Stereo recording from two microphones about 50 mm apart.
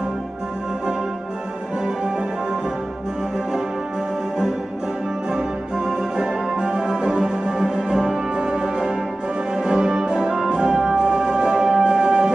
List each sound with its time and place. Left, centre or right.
5.3 s music: centre